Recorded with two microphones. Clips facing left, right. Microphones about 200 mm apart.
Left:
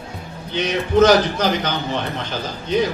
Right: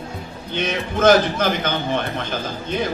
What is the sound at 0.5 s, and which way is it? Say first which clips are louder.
A man's voice: left 5 dB; 50° right (ahead or behind).